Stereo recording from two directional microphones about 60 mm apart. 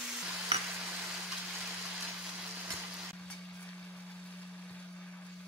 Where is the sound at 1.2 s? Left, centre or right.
Centre.